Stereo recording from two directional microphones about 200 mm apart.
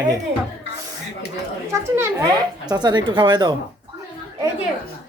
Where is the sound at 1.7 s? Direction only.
15° right (ahead or behind).